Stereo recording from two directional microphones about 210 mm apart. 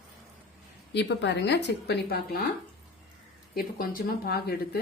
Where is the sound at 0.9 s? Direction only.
55° left (ahead or behind).